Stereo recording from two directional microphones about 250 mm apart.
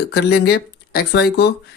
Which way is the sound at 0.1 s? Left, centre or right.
Left.